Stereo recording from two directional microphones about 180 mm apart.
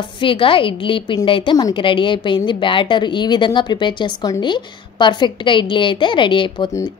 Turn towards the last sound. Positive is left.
turn(degrees=25)  # may be behind; listen again after turning